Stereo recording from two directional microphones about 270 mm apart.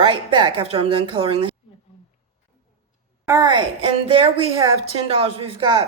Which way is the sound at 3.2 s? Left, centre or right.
Centre.